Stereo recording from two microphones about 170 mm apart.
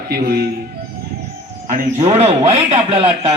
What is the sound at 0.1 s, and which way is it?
Speech, 65° right (ahead or behind).